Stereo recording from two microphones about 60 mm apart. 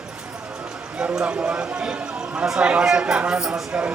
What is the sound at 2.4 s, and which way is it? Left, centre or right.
Speech, centre.